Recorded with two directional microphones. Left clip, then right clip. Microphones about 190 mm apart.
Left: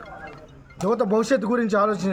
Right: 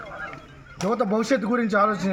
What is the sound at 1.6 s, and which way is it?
Speech, 10° left (ahead or behind).